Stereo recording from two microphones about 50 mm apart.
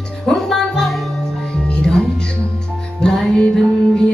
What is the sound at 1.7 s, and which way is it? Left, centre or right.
Music, centre.